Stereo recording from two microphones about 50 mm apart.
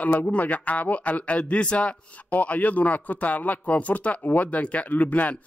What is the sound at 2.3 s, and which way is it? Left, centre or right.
Speech, left.